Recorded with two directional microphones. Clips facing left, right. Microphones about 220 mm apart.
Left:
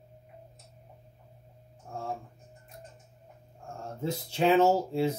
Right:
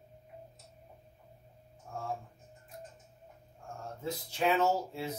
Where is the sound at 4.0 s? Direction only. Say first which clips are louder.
Left 5 dB; 30° left (ahead or behind).